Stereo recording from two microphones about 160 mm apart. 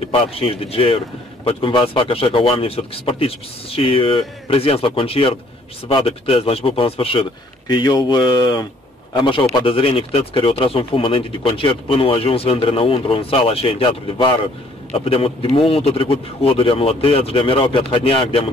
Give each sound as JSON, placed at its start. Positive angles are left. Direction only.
{"t": 0.1, "sound": "speech", "side_deg": 35}